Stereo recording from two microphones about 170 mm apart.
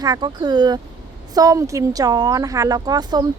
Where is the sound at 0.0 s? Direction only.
25° right (ahead or behind).